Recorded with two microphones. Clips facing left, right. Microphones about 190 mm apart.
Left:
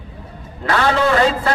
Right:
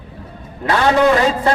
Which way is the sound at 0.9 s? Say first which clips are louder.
Right 3 dB; 15° right (ahead or behind).